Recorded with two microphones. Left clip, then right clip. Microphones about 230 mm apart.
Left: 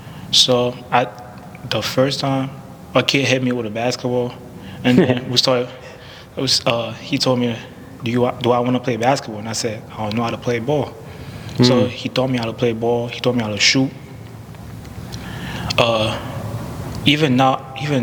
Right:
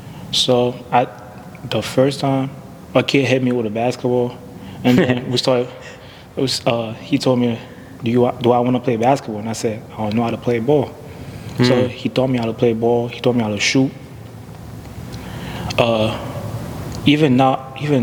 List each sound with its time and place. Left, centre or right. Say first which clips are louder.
0.3 s speech: left 1 dB; left
15.4 s a sound: even; left
17.0 s a man's voice: right 1 dB; left